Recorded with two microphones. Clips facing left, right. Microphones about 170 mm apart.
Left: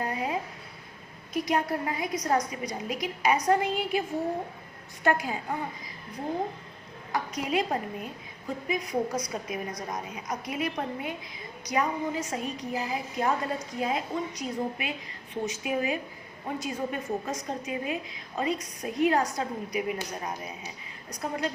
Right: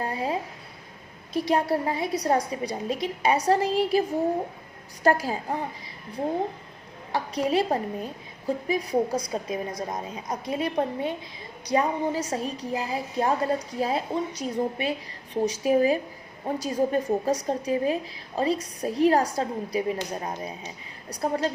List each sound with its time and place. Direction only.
0.0 s a sound: 30° right (ahead or behind)
1.3 s a woman's voice: 30° right (ahead or behind)
5.0 s a woman's voice: 35° right (ahead or behind)
7.1 s a woman's voice: 30° right (ahead or behind)